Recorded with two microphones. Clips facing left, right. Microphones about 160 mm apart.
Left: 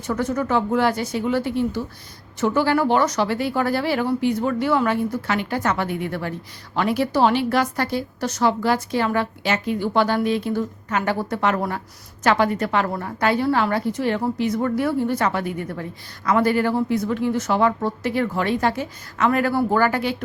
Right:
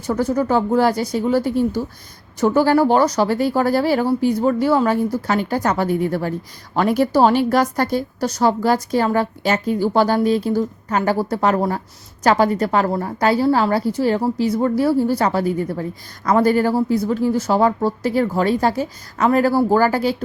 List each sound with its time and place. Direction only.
0.1 s a woman's voice: 35° right (ahead or behind)